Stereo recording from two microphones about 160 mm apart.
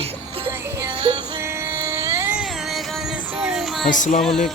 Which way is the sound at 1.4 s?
15° right (ahead or behind).